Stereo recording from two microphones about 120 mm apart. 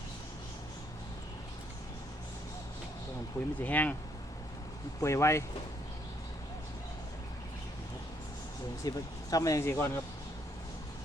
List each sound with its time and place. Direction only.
3.6 s speech: 15° left (ahead or behind)
4.9 s speech: 25° left (ahead or behind)
8.8 s speech: 30° left (ahead or behind)